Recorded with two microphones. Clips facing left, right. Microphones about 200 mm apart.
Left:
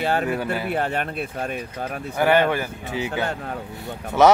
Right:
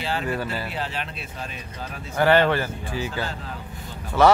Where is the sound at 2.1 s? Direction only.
10° left (ahead or behind).